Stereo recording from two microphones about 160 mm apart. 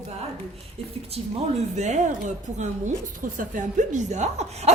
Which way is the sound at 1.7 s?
45° right (ahead or behind).